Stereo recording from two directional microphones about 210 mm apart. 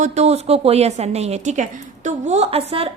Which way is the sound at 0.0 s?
30° right (ahead or behind).